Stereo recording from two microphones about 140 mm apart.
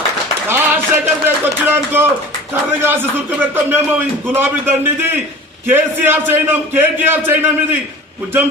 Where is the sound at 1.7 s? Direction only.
15° right (ahead or behind).